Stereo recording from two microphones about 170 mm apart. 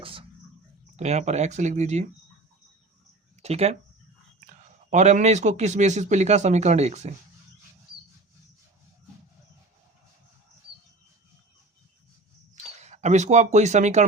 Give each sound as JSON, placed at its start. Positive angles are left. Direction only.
{"t": 0.0, "sound": "a sound", "side_deg": -30}
{"t": 0.9, "sound": "speech", "side_deg": -40}
{"t": 3.4, "sound": "speech", "side_deg": -40}
{"t": 12.6, "sound": "speech", "side_deg": -40}